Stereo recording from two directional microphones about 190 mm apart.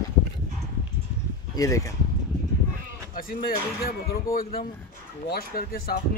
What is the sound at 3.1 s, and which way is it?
Speech, 50° left (ahead or behind).